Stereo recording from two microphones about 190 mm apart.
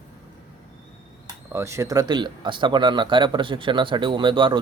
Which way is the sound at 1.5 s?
15° right (ahead or behind).